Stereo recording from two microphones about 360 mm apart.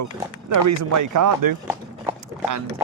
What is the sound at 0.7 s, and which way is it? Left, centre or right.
Speech, right.